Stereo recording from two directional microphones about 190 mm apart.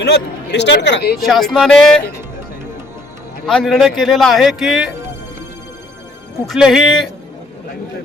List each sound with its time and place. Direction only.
0.0 s speech: 65° left (ahead or behind)
1.3 s a man's voice: centre (ahead or behind)
3.4 s a man's voice: centre (ahead or behind)
6.5 s a man's voice: centre (ahead or behind)